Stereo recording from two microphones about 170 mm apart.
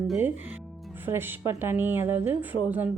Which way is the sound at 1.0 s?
15° right (ahead or behind).